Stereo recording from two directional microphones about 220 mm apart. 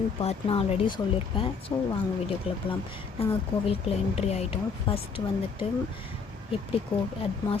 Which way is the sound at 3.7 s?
25° left (ahead or behind).